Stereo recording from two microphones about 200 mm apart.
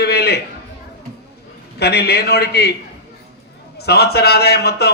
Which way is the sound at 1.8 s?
55° left (ahead or behind).